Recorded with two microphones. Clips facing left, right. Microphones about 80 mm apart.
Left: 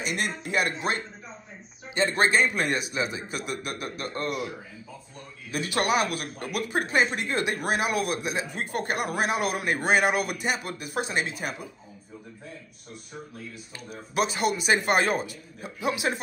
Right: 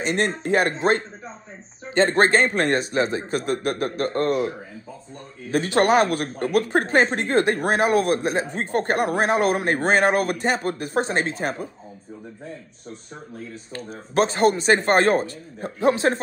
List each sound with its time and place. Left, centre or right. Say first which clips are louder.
0.0 s speech: right 7 dB; right
13.7 s speech: right 6 dB; right